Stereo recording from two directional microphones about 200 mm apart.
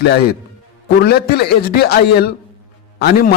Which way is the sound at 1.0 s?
50° left (ahead or behind).